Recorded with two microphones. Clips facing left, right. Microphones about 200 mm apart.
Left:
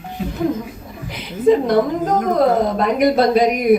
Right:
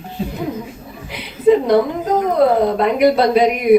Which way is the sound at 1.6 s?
50° left (ahead or behind).